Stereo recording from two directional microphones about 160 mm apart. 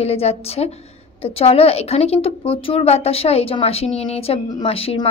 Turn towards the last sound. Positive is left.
turn(degrees=35)  # may be behind; listen again after turning